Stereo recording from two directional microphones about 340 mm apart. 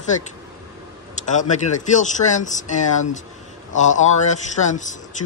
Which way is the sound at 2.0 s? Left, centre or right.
Left.